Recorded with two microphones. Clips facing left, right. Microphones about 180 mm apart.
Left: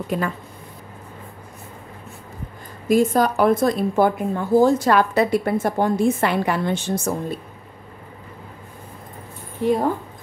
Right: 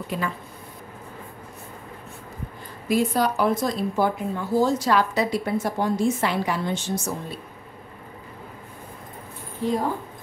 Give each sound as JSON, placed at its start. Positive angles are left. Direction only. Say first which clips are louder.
{"t": 0.1, "sound": "speech", "louder": "left 4 dB", "side_deg": 45}
{"t": 2.9, "sound": "speech", "louder": "left 5 dB", "side_deg": 45}
{"t": 9.6, "sound": "speech", "louder": "left 5 dB", "side_deg": 65}